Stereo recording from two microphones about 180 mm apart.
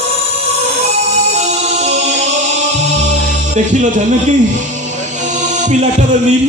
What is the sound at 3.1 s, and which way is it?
Speech, 40° right (ahead or behind).